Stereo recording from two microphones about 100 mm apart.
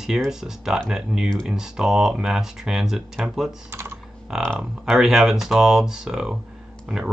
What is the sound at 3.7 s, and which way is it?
Speech, 25° right (ahead or behind).